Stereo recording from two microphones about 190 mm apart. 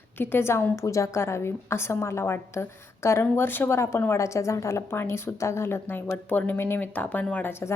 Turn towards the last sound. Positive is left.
turn(degrees=10)  # may be behind; listen again after turning